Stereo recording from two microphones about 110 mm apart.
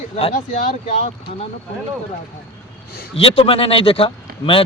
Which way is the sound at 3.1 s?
60° left (ahead or behind).